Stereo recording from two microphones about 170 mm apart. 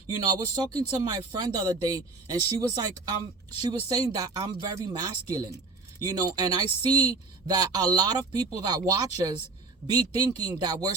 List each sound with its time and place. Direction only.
0.1 s speech: 20° right (ahead or behind)